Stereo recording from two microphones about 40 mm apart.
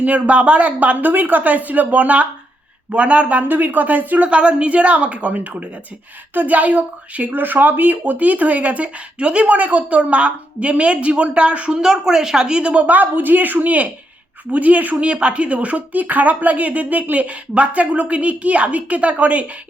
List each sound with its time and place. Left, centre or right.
0.0 s a woman's voice: right
7.3 s speech: right
11.7 s a woman's voice: centre
12.9 s a woman's voice: right
15.1 s speech: right